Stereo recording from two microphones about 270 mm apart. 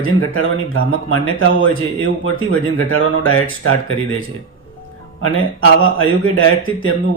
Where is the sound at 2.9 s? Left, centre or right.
Left.